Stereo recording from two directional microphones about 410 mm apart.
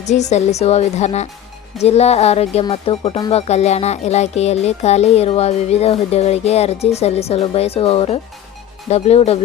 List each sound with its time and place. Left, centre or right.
0.0 s speech: centre